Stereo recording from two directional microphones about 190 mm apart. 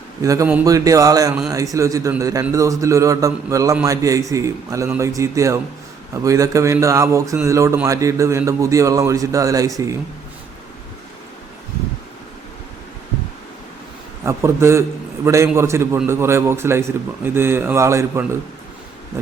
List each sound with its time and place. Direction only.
0.2 s a man's voice: 15° right (ahead or behind)
14.3 s a man's voice: 15° right (ahead or behind)